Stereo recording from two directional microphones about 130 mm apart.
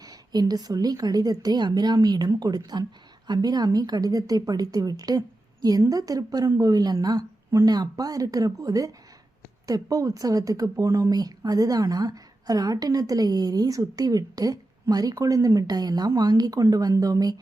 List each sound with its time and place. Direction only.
0.0 s a woman's voice: 30° right (ahead or behind)